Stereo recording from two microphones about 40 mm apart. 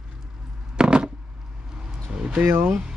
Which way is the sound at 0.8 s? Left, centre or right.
Right.